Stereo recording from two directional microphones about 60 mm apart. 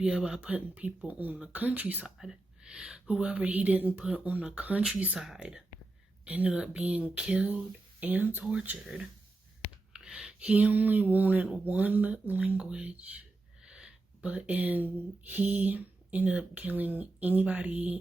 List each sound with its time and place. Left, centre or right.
0.0 s speech: centre; by 2.0 s right
2.0 s speech: centre
6.2 s speech: right
9.9 s speech: centre